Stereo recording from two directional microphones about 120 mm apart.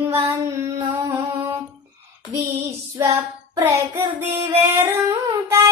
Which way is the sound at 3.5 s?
25° right (ahead or behind).